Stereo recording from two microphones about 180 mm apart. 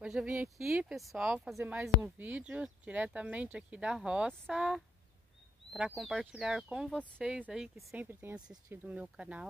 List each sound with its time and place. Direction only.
0.0 s speech: 5° right (ahead or behind)